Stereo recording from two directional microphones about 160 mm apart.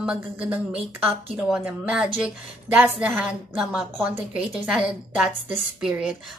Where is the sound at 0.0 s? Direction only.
5° right (ahead or behind).